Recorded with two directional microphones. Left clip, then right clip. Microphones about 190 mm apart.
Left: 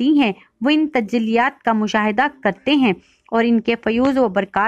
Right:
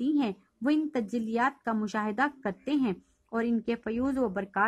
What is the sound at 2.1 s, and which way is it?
A woman's voice, 50° left (ahead or behind).